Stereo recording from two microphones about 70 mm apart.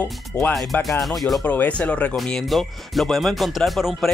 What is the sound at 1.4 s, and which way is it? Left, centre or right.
Speech, left.